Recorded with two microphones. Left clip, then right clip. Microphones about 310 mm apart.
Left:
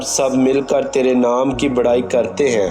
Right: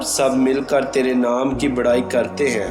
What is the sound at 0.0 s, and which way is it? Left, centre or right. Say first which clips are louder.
A man's voice: left 2 dB; left.